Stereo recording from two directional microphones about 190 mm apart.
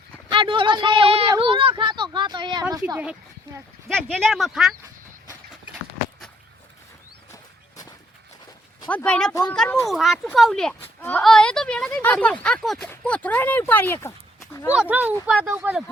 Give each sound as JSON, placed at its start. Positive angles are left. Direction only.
{"t": 0.3, "sound": "speech", "side_deg": -25}
{"t": 2.8, "sound": "speech", "side_deg": -5}
{"t": 5.7, "sound": "a sound", "side_deg": 0}
{"t": 8.9, "sound": "speech", "side_deg": 5}
{"t": 14.7, "sound": "speech", "side_deg": -5}